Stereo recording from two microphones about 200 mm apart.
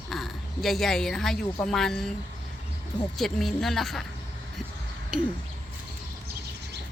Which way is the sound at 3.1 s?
Centre (ahead or behind).